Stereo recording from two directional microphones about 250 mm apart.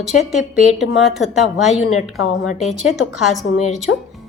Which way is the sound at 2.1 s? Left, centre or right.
Left.